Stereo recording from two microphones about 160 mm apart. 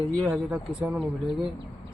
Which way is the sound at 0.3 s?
10° right (ahead or behind).